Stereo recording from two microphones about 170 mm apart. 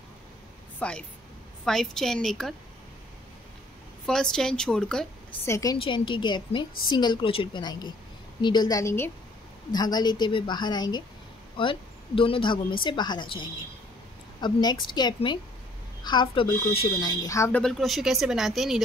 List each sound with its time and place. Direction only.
0.7 s speech: 5° left (ahead or behind)
4.0 s speech: 5° left (ahead or behind)
5.4 s a woman's voice: 20° left (ahead or behind)
17.6 s speech: centre (ahead or behind)